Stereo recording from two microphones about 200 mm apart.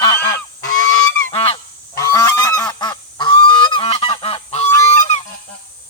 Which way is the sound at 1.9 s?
15° left (ahead or behind).